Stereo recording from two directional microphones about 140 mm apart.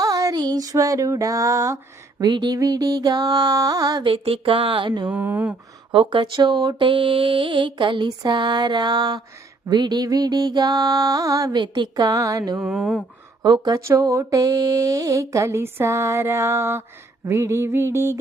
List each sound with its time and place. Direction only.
0.0 s female singing: 25° right (ahead or behind)
4.0 s speech: 40° right (ahead or behind)
5.0 s speech: 15° right (ahead or behind)
5.9 s speech: 35° right (ahead or behind)
9.6 s female singing: 30° right (ahead or behind)
12.5 s speech: 5° right (ahead or behind)
13.4 s female singing: 30° right (ahead or behind)